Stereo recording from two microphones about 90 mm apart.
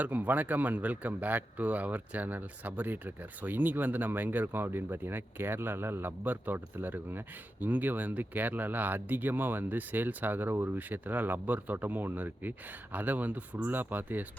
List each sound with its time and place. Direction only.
0.0 s speech: 15° right (ahead or behind)